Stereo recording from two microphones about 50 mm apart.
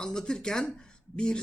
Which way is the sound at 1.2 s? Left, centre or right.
Centre.